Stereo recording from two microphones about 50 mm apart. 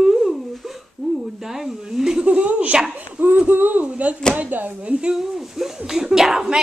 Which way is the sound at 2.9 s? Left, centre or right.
Right.